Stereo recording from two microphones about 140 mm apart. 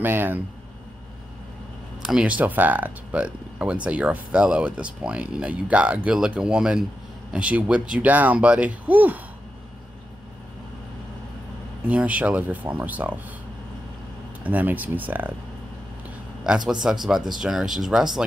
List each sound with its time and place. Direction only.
0.0 s speech: 15° right (ahead or behind)
2.0 s speech: 5° right (ahead or behind)
11.9 s speech: 10° right (ahead or behind)
14.4 s speech: 10° right (ahead or behind)
16.4 s speech: 5° right (ahead or behind)